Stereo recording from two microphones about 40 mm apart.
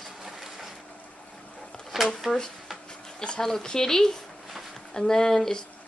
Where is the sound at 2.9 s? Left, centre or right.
Left.